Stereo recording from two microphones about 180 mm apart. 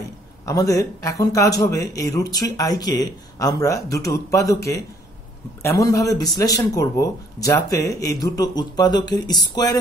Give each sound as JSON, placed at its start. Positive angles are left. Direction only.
{"t": 0.5, "sound": "speech", "side_deg": 20}